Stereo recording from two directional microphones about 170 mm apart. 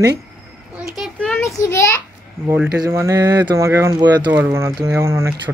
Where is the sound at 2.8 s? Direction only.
15° right (ahead or behind).